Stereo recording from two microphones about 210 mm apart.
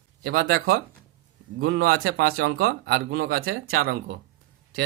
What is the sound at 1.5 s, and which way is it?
Speech, 45° right (ahead or behind).